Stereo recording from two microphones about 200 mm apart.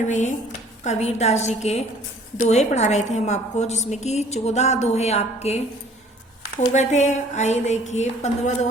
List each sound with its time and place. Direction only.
0.1 s a woman's voice: 35° left (ahead or behind)
6.7 s a woman's voice: 35° left (ahead or behind)